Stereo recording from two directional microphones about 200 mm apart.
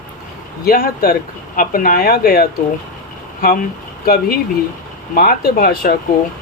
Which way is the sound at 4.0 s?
50° left (ahead or behind).